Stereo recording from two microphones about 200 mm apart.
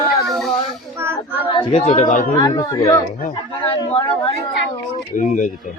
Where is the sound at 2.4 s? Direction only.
20° left (ahead or behind).